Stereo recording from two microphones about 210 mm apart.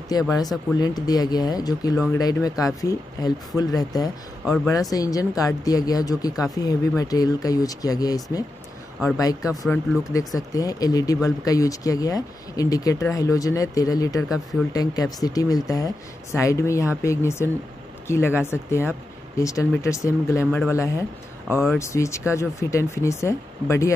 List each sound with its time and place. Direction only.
0.1 s speech: 15° left (ahead or behind)